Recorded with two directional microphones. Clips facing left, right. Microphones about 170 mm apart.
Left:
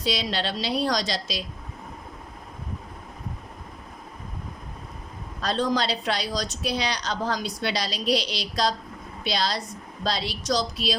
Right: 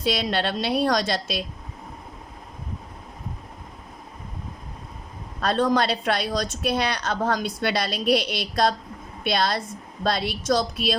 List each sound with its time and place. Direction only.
0.0 s speech: 55° right (ahead or behind)
5.4 s speech: 55° right (ahead or behind)